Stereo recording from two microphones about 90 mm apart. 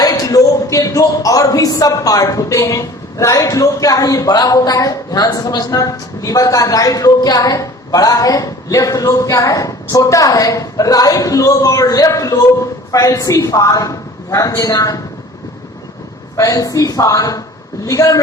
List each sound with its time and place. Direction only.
0.0 s speech: 45° left (ahead or behind)
16.4 s speech: 40° left (ahead or behind)